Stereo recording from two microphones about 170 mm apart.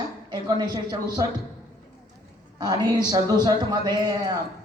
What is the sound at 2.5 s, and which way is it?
A man's voice, 25° right (ahead or behind).